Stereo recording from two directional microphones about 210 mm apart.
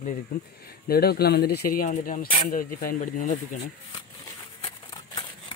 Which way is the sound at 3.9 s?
20° left (ahead or behind).